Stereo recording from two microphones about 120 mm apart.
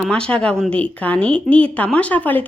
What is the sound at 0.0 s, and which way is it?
Speech, 5° left (ahead or behind).